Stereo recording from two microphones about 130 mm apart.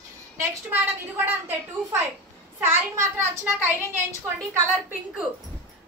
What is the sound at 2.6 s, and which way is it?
Speech, 20° right (ahead or behind).